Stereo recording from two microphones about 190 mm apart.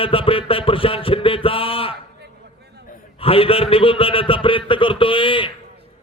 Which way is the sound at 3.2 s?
30° left (ahead or behind).